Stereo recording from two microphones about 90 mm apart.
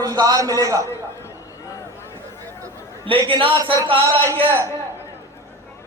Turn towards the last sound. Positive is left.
turn(degrees=-30)  # may be behind; listen again after turning